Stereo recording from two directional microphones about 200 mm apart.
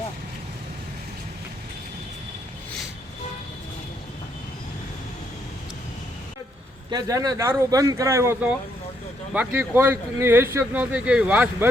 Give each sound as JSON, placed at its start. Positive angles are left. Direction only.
{"t": 6.9, "sound": "speech", "side_deg": -20}